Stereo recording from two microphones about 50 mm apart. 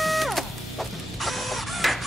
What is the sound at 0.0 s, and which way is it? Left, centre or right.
Printer, centre.